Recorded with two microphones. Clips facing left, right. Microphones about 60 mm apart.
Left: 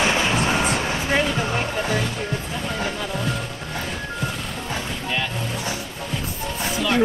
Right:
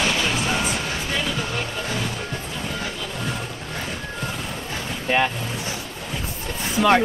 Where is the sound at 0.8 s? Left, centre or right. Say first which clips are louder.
Left 4 dB; left.